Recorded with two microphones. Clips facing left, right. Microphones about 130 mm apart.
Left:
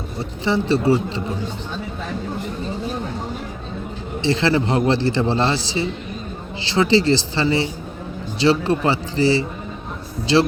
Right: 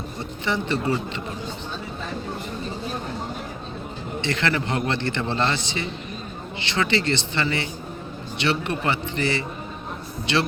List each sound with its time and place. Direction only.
0.4 s speech: 30° left (ahead or behind)
4.3 s a man's voice: 30° left (ahead or behind)